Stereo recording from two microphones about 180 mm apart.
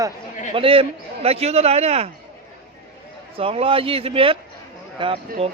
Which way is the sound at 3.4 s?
30° right (ahead or behind).